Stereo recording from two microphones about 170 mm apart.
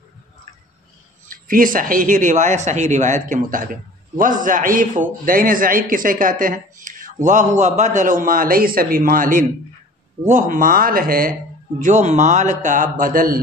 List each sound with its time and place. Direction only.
1.3 s a man's voice: 55° right (ahead or behind)
11.8 s a man's voice: 45° right (ahead or behind)